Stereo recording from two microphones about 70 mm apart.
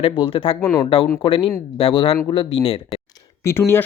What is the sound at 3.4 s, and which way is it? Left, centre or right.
Speech, left.